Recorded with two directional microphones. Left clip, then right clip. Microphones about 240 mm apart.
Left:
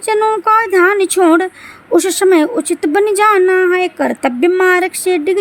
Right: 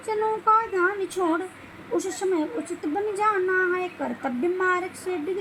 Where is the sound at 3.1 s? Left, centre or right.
Left.